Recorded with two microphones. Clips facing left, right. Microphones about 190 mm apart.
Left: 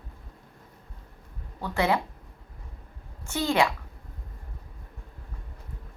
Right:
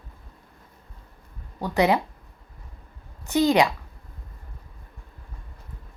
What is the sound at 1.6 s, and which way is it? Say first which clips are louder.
Speech: right 4 dB; 15° right (ahead or behind).